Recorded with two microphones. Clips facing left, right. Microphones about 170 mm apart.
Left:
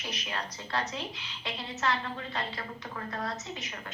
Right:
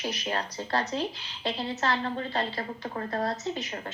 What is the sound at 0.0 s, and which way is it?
A woman's voice, 35° right (ahead or behind).